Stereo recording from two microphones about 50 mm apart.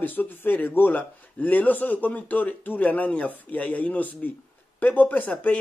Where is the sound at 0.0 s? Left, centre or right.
Left.